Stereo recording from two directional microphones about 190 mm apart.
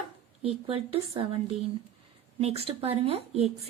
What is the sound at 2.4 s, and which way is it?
Speech, 30° right (ahead or behind).